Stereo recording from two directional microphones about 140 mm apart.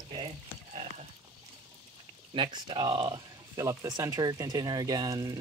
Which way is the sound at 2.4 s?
35° right (ahead or behind).